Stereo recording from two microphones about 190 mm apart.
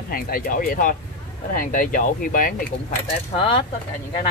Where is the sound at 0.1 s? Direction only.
50° left (ahead or behind).